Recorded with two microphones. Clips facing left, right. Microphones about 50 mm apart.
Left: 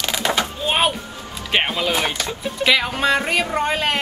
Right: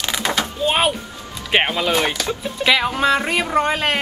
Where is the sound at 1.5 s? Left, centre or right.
Centre.